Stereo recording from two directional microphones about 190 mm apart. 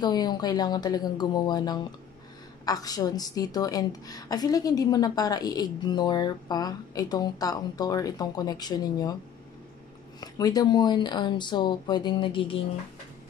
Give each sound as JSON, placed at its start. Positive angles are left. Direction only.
{"t": 0.0, "sound": "a woman's voice", "side_deg": 20}
{"t": 10.2, "sound": "a woman's voice", "side_deg": 20}